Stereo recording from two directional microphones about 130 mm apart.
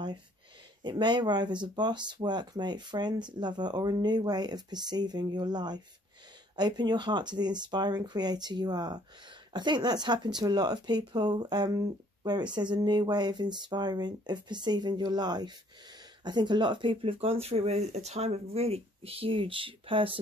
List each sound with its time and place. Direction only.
0.8 s speech: 35° right (ahead or behind)